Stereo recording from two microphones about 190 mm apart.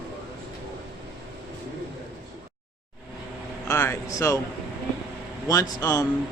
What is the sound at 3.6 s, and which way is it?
Speech, 15° left (ahead or behind).